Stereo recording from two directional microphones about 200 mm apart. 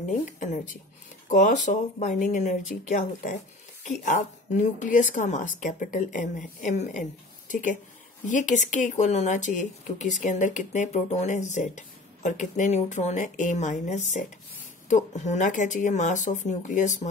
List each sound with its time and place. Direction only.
0.2 s speech: 40° left (ahead or behind)